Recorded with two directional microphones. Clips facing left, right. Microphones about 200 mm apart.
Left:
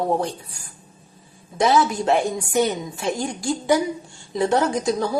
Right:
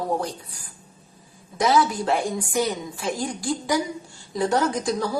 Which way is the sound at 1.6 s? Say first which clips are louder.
Left 2 dB; 25° left (ahead or behind).